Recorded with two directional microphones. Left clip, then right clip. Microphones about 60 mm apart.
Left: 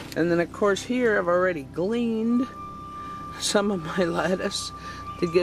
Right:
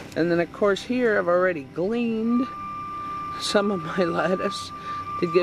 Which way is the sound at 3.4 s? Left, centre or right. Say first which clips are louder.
Right 1 dB; centre.